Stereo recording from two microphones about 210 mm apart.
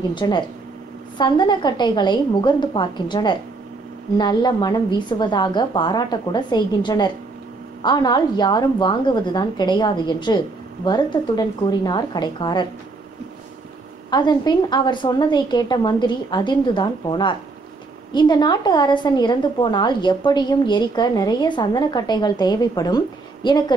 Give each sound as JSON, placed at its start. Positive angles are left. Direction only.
{"t": 0.1, "sound": "a woman's voice", "side_deg": 20}
{"t": 14.1, "sound": "a woman's voice", "side_deg": 20}